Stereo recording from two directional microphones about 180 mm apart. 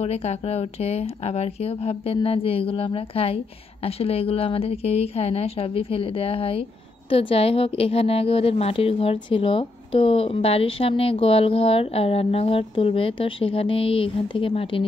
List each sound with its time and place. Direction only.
0.0 s speech: 35° left (ahead or behind)